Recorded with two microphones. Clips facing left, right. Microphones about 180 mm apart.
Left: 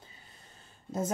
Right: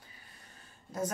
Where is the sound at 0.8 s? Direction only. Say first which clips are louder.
Left 3 dB; 25° left (ahead or behind).